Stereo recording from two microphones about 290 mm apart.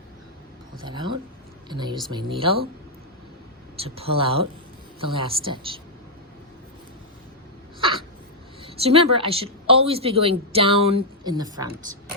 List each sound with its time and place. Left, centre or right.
0.9 s speech: centre
3.8 s speech: centre
8.6 s speech: centre